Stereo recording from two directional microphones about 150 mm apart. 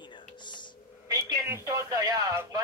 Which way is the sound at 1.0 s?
25° right (ahead or behind).